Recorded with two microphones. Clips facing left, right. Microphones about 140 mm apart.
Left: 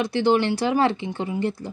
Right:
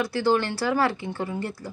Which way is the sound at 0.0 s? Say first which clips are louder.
Left 3 dB; 20° left (ahead or behind).